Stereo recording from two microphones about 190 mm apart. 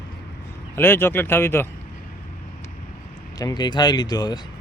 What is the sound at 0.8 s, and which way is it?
Speech, 10° left (ahead or behind).